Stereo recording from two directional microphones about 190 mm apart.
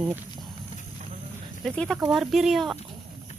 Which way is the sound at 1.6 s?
5° left (ahead or behind).